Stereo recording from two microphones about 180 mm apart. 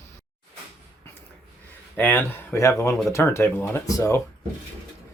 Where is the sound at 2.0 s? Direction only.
10° left (ahead or behind).